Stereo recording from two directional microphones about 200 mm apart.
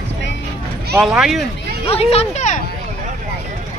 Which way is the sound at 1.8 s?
30° left (ahead or behind).